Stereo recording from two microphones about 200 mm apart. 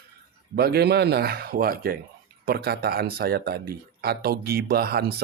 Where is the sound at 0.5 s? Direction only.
50° right (ahead or behind).